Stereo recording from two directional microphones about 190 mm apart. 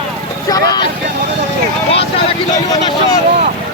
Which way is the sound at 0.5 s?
20° left (ahead or behind).